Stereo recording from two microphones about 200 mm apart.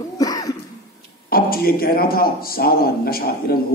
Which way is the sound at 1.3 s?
50° left (ahead or behind).